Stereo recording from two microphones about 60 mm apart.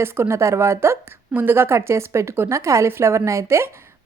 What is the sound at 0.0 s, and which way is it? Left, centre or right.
A woman's voice, right.